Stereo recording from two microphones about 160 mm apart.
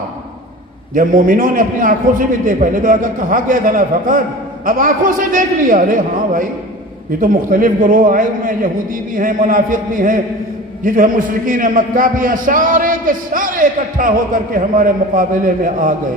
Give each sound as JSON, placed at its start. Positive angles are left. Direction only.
{"t": 0.9, "sound": "a man's voice", "side_deg": -55}